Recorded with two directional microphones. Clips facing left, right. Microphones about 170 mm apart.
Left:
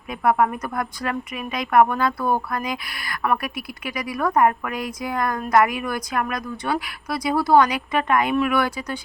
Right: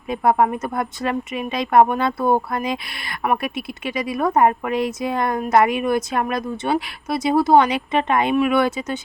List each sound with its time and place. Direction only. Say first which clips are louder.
0.1 s speech: right 2 dB; 25° right (ahead or behind)